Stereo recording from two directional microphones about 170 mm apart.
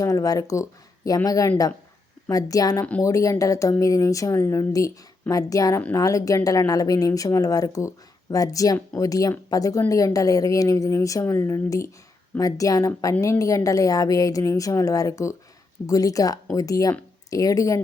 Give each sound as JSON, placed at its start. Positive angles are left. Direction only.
{"t": 0.0, "sound": "speech", "side_deg": 20}